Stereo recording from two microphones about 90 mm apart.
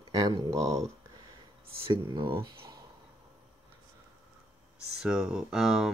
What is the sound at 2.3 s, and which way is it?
Speech, 40° right (ahead or behind).